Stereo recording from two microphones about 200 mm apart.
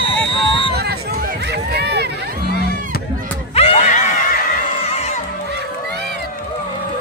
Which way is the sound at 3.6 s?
35° left (ahead or behind).